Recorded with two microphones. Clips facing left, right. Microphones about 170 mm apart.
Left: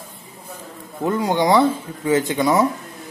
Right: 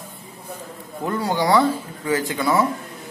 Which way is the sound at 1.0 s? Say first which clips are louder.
Left 3 dB; 20° left (ahead or behind).